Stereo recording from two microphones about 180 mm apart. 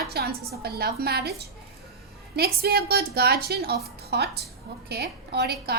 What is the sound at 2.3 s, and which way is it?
A woman's voice, 60° right (ahead or behind).